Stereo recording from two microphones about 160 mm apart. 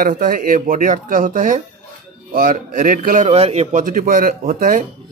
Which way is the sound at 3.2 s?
40° right (ahead or behind).